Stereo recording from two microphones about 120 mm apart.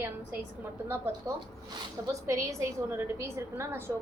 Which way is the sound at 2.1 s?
25° right (ahead or behind).